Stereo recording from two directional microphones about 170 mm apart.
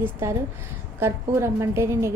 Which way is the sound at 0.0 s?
15° right (ahead or behind).